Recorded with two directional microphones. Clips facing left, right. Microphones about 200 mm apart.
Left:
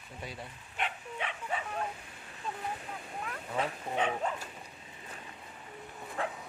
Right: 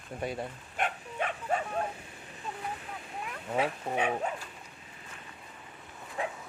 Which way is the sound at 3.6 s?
10° right (ahead or behind).